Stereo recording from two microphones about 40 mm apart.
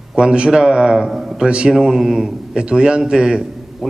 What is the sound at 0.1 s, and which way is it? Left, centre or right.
A man's voice, right.